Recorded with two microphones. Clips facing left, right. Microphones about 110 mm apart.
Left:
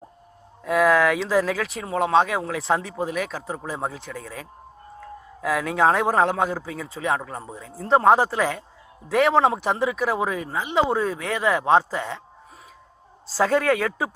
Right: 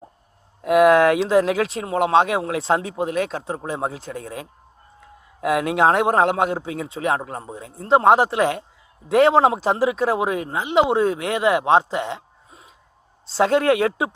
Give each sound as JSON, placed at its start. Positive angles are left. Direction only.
{"t": 0.6, "sound": "speech", "side_deg": -20}
{"t": 13.2, "sound": "speech", "side_deg": -25}